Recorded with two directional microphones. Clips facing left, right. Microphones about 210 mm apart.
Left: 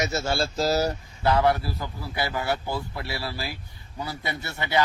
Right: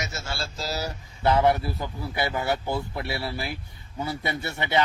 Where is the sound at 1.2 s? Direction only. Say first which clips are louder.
Right 1 dB; 20° right (ahead or behind).